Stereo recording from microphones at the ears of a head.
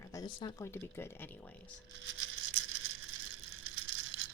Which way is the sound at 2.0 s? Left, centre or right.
Right.